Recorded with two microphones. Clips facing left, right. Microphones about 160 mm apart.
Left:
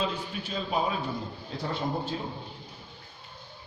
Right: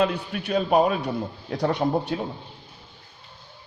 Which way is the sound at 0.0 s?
70° right (ahead or behind).